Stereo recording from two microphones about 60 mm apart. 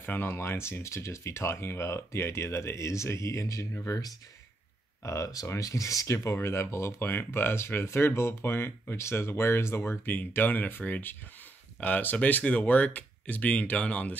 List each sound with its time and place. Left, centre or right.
0.0 s speech: left
3.8 s speech: left
5.0 s speech: left
6.3 s speech: left